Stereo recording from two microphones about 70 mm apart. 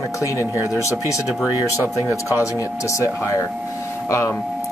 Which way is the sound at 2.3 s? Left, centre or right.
Left.